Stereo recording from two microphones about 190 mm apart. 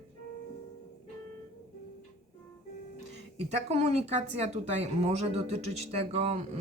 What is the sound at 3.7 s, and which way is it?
Speech, 35° right (ahead or behind).